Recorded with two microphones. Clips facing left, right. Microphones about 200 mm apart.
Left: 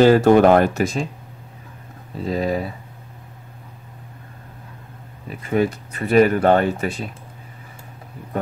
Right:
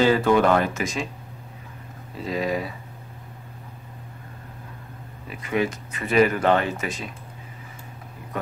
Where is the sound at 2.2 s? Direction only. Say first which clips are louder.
Left 4 dB; 35° left (ahead or behind).